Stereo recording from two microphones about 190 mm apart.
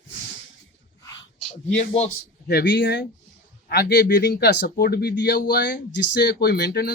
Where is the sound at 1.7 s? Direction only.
35° left (ahead or behind).